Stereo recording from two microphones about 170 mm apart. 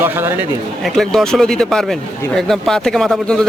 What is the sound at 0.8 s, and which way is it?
A man's voice, centre (ahead or behind).